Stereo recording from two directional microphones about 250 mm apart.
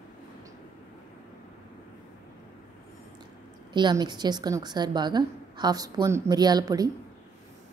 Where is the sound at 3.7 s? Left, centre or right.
Centre.